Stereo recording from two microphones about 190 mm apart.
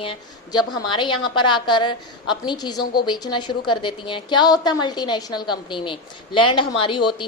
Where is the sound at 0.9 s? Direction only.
25° left (ahead or behind).